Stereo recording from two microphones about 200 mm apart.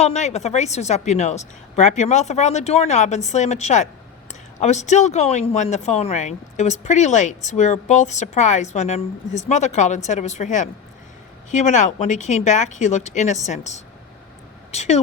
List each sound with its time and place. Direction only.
0.0 s speech: 35° left (ahead or behind)